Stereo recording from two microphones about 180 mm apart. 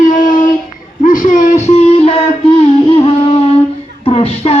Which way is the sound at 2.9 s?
35° left (ahead or behind).